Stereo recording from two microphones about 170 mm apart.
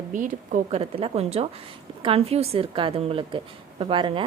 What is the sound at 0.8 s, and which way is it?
A woman's voice, 35° right (ahead or behind).